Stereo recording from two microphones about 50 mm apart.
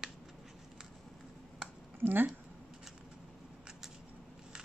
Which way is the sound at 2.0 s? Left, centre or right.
Right.